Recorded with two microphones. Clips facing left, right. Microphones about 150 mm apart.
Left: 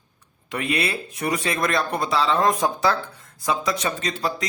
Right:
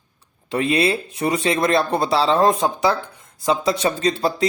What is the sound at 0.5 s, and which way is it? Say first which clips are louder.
Speech: right 6 dB; 30° right (ahead or behind).